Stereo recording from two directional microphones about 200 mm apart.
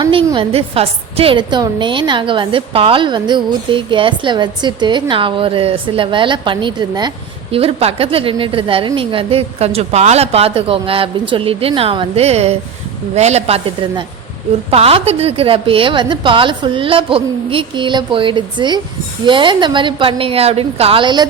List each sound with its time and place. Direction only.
0.0 s a woman's voice: 25° right (ahead or behind)